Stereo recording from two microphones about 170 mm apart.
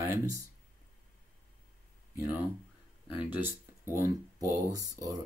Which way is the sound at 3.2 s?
10° right (ahead or behind).